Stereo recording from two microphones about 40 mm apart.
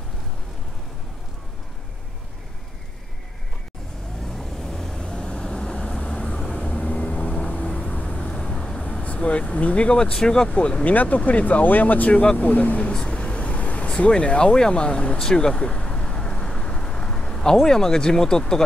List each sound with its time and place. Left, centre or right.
4.3 s vehicle: centre
5.0 s vehicle: left
9.0 s speech: left
10.1 s speech: centre
10.5 s speech: left
10.9 s speech: left
12.9 s speech: left
15.1 s vehicle: centre
17.6 s speech: centre